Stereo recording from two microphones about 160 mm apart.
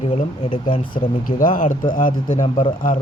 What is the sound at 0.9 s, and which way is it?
Speech, 60° left (ahead or behind).